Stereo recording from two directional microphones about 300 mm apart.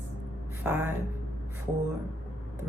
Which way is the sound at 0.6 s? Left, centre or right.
Centre.